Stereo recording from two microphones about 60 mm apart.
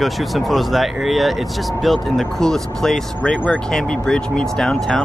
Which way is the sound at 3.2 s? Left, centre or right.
Left.